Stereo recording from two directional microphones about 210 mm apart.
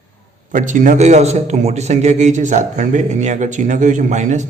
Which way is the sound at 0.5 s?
35° right (ahead or behind).